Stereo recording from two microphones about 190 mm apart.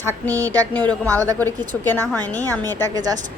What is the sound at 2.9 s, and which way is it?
Speech, 20° right (ahead or behind).